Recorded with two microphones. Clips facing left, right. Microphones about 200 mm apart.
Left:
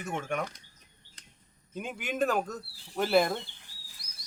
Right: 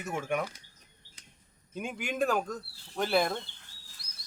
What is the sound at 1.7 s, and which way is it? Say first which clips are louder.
Speech: even; centre (ahead or behind).